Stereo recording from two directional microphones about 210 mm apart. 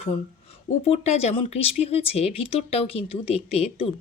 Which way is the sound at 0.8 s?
30° left (ahead or behind).